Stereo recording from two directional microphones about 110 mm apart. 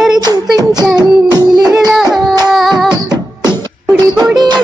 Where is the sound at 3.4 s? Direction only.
25° left (ahead or behind).